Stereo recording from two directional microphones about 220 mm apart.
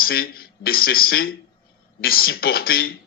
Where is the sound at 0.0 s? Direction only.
45° left (ahead or behind).